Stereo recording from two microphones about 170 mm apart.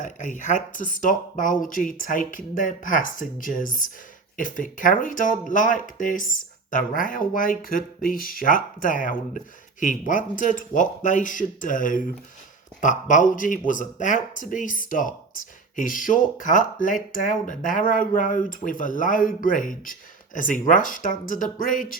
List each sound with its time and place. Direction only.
0.0 s speech: 50° left (ahead or behind)